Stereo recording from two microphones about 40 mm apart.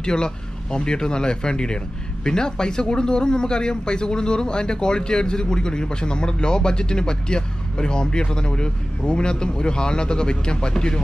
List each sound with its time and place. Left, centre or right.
0.0 s speech: left